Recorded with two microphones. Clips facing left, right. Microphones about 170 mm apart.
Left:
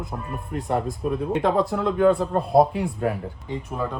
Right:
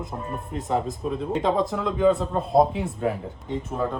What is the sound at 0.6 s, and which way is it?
Speech, 60° left (ahead or behind).